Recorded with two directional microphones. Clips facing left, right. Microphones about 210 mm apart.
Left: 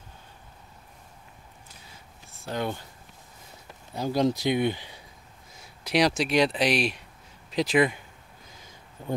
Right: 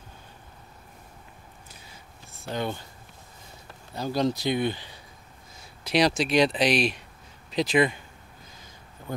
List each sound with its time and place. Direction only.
2.4 s speech: 5° left (ahead or behind)
3.9 s speech: 15° left (ahead or behind)
5.9 s speech: 10° left (ahead or behind)